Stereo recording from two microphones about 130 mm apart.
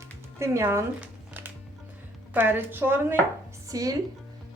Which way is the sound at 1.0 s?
15° right (ahead or behind).